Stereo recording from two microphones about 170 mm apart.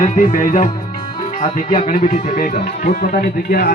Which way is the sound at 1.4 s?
45° left (ahead or behind).